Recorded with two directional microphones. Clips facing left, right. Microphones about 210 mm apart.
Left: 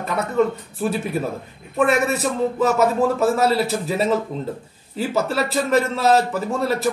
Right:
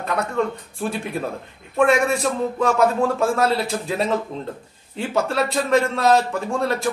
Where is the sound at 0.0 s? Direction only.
5° left (ahead or behind).